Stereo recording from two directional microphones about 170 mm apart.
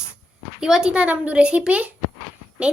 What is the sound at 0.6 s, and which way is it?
A woman's voice, 5° right (ahead or behind).